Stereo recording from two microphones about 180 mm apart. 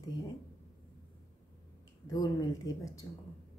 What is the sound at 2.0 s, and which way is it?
Speech, 20° left (ahead or behind).